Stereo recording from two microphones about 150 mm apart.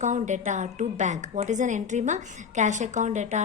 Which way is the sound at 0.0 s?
55° right (ahead or behind).